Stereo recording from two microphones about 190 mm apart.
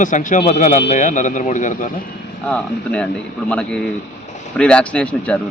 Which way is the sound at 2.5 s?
5° left (ahead or behind).